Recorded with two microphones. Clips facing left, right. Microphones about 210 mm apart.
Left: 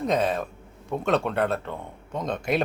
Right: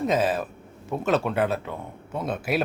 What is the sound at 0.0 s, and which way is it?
Speech, 5° right (ahead or behind).